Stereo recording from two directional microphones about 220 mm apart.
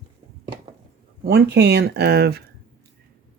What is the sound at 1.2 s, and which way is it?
Speech, 45° right (ahead or behind).